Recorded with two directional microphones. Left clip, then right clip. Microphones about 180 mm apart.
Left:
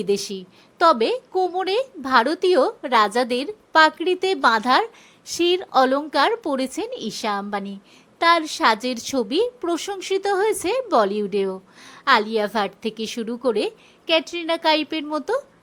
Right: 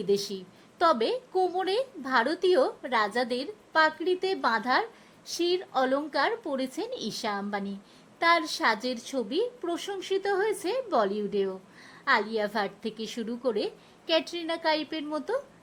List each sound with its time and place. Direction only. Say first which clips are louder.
0.3 s a woman's voice: left 5 dB; 20° left (ahead or behind)